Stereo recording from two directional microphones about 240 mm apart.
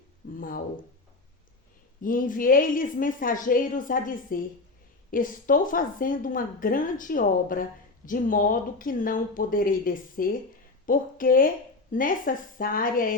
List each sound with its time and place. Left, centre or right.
0.3 s a woman's voice: left
2.0 s a woman's voice: left